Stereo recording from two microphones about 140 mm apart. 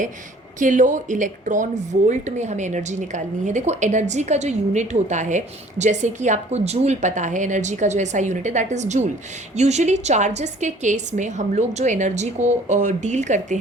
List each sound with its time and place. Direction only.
0.6 s speech: 65° right (ahead or behind)